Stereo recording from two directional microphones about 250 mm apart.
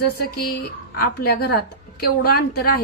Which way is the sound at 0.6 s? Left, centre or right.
Left.